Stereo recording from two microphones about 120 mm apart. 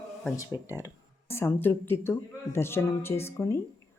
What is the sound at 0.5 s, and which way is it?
Speech, 35° left (ahead or behind).